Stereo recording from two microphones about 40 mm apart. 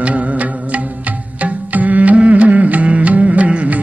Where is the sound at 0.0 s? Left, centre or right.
Right.